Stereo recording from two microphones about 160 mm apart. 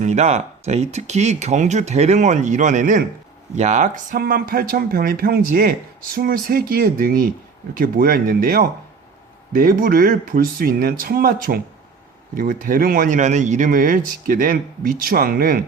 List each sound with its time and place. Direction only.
0.0 s speech: 45° right (ahead or behind)
4.2 s speech: 70° right (ahead or behind)